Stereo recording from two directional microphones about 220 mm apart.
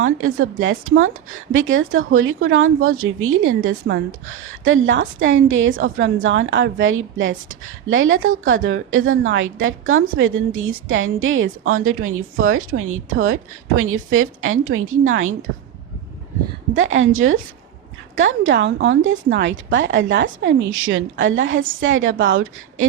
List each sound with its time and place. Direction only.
0.0 s a woman's voice: 70° right (ahead or behind)
16.7 s a woman's voice: 60° right (ahead or behind)